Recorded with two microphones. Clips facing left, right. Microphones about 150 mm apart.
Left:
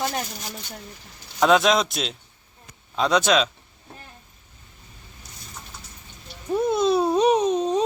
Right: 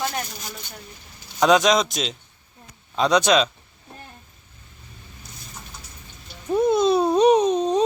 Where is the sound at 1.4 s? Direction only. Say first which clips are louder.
Right 1 dB; centre (ahead or behind).